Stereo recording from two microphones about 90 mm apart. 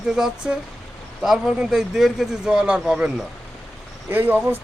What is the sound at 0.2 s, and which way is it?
Speech, 10° right (ahead or behind).